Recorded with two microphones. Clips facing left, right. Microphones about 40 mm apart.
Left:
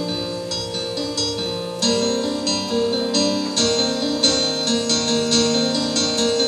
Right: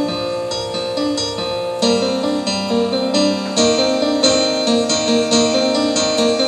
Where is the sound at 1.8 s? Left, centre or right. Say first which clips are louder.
Right 3 dB; right.